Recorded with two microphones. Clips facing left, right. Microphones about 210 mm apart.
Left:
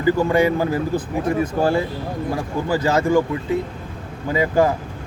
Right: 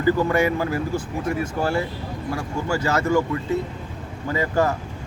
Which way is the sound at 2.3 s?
15° left (ahead or behind).